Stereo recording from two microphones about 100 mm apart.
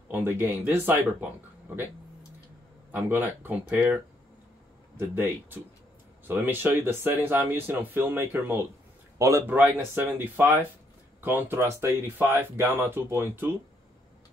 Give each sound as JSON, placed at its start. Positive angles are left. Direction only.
{"t": 0.1, "sound": "speech", "side_deg": -20}
{"t": 2.9, "sound": "speech", "side_deg": -20}
{"t": 4.9, "sound": "speech", "side_deg": -20}